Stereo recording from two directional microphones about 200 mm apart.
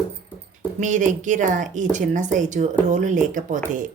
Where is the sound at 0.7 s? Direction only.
40° right (ahead or behind).